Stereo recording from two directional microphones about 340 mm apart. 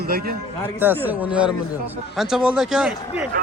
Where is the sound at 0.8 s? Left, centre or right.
Centre.